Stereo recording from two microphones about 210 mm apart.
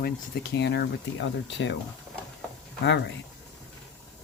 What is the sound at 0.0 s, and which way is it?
Speech, 50° left (ahead or behind).